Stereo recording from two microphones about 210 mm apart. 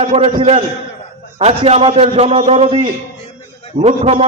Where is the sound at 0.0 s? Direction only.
30° right (ahead or behind).